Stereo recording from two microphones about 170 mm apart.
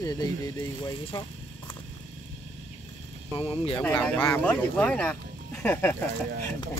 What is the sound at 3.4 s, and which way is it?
Speech, 35° left (ahead or behind).